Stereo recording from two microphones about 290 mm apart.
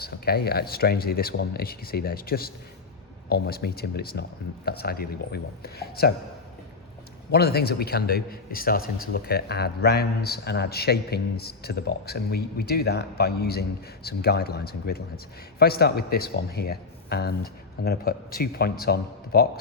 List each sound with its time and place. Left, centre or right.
0.0 s a man's voice: left
7.3 s a man's voice: left